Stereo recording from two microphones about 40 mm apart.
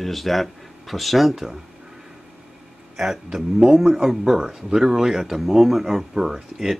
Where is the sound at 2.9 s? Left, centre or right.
Centre.